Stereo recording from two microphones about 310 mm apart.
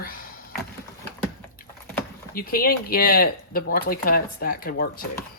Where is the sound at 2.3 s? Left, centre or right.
Left.